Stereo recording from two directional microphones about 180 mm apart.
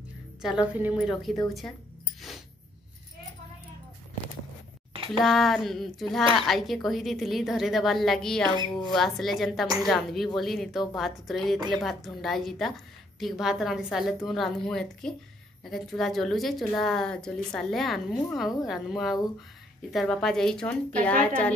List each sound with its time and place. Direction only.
0.4 s a woman's voice: 5° right (ahead or behind)
4.9 s a sound: 30° right (ahead or behind)
5.2 s a woman's voice: centre (ahead or behind)